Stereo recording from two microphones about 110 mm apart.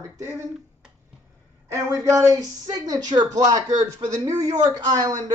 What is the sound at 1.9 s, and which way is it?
Speech, 30° right (ahead or behind).